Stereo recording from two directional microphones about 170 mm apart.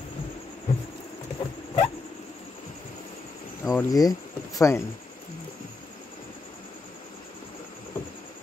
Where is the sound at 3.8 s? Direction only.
20° left (ahead or behind).